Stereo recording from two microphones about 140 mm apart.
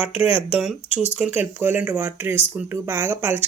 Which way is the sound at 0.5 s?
5° right (ahead or behind).